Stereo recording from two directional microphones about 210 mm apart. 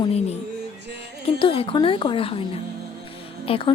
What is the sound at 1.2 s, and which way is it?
A woman's voice, 25° left (ahead or behind).